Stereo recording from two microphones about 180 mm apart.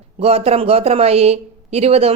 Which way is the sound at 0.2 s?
35° right (ahead or behind).